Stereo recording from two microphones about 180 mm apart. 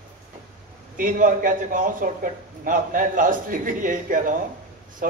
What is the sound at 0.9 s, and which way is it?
A man's voice, 50° right (ahead or behind).